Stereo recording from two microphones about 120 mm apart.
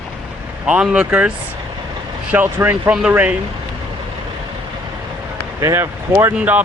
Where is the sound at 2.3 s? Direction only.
15° right (ahead or behind).